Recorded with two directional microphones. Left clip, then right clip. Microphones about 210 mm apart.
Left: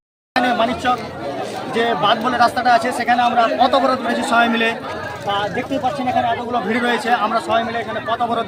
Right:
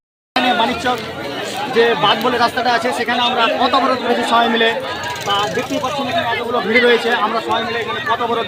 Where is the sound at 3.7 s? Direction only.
20° left (ahead or behind).